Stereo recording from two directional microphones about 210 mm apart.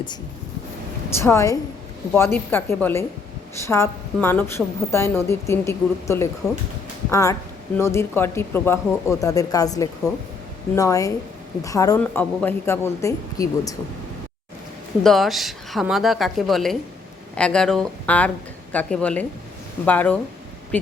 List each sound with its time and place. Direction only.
1.2 s a woman's voice: 15° left (ahead or behind)
15.0 s a woman's voice: centre (ahead or behind)